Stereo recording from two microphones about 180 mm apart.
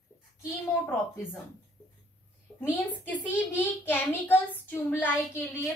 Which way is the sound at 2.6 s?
10° left (ahead or behind).